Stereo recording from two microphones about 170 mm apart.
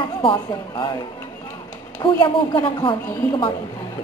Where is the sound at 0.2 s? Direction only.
25° left (ahead or behind).